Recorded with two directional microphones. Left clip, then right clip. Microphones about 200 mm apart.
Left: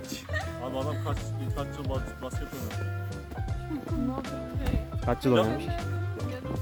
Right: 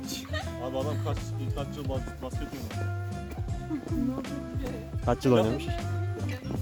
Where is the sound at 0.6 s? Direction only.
15° right (ahead or behind).